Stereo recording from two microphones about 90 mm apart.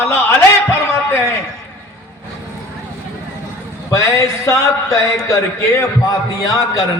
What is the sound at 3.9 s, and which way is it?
A man's voice, 35° left (ahead or behind).